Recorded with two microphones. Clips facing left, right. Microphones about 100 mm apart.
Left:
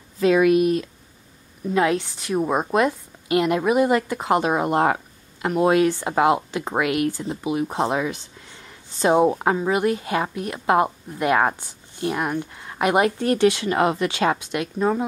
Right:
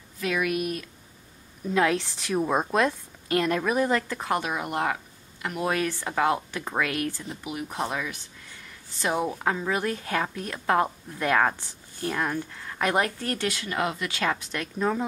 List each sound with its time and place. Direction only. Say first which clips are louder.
0.2 s speech: left 11 dB; 30° left (ahead or behind)
1.7 s a woman's voice: left 3 dB; 5° left (ahead or behind)